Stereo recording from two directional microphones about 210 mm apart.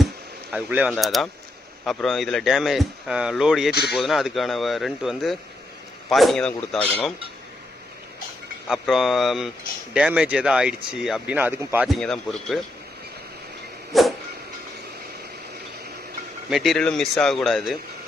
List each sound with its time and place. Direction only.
0.5 s speech: 5° right (ahead or behind)
3.7 s speech: 50° left (ahead or behind)
3.9 s speech: centre (ahead or behind)
8.6 s speech: centre (ahead or behind)
13.9 s speech: centre (ahead or behind)
16.5 s speech: centre (ahead or behind)